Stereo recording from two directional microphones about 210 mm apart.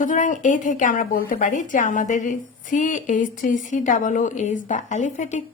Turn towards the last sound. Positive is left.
turn(degrees=35)  # may be behind; listen again after turning